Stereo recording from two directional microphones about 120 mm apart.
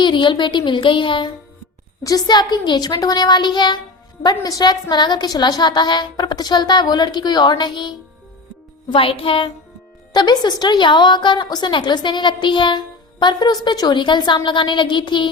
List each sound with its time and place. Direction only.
0.0 s a woman's voice: 40° left (ahead or behind)
10.1 s a woman's voice: 35° left (ahead or behind)